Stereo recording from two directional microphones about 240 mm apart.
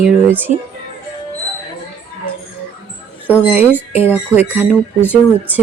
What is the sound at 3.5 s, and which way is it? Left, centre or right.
Speech, centre.